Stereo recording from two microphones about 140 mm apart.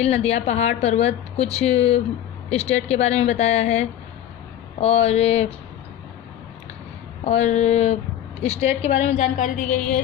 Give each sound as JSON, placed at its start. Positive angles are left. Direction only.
{"t": 0.0, "sound": "a woman's voice", "side_deg": 50}
{"t": 7.3, "sound": "a woman's voice", "side_deg": 55}